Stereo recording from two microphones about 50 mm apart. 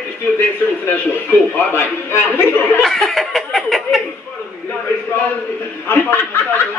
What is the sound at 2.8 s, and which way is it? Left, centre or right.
Snicker, centre.